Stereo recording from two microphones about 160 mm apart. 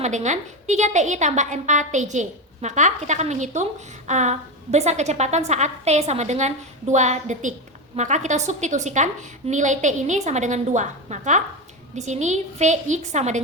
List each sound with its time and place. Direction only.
0.0 s a woman's voice: 45° right (ahead or behind)